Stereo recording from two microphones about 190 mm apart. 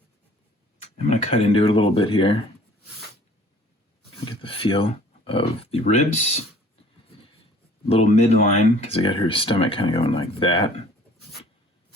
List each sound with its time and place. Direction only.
0.9 s speech: 35° left (ahead or behind)
4.3 s a sound: 30° left (ahead or behind)
5.8 s speech: 35° left (ahead or behind)
7.9 s speech: 35° left (ahead or behind)